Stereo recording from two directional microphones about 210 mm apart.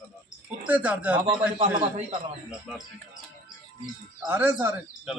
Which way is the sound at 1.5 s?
25° right (ahead or behind).